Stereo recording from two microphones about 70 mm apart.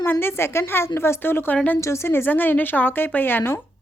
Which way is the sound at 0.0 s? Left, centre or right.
Left.